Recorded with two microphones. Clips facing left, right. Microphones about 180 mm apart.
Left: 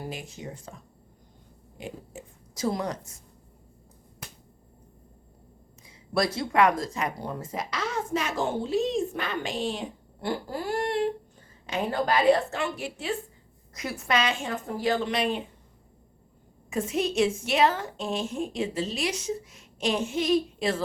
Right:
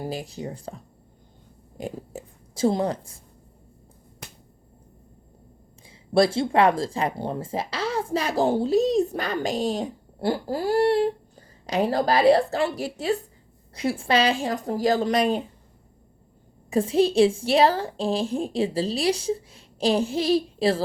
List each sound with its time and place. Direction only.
0.0 s speech: 35° right (ahead or behind)
1.8 s speech: 35° right (ahead or behind)
5.8 s speech: 30° right (ahead or behind)
16.6 s speech: 30° right (ahead or behind)